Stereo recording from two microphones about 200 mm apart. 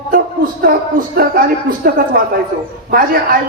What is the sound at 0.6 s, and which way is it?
A woman's voice, 45° right (ahead or behind).